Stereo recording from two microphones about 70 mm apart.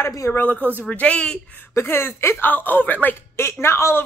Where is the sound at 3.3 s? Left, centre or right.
Left.